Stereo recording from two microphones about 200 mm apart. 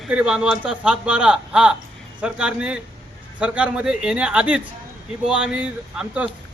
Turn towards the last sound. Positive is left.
turn(degrees=-5)  # may be behind; listen again after turning